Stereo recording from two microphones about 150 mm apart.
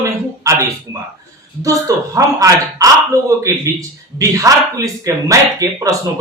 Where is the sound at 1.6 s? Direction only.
20° right (ahead or behind).